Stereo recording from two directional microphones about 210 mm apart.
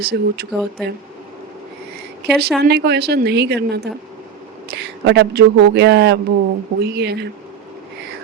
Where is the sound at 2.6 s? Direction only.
50° right (ahead or behind).